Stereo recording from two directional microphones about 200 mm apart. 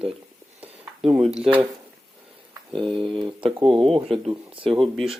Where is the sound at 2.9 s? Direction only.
25° right (ahead or behind).